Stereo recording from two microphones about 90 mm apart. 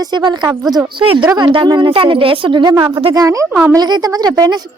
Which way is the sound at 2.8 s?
80° right.